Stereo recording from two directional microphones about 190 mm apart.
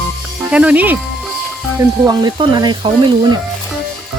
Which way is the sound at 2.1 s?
20° right (ahead or behind).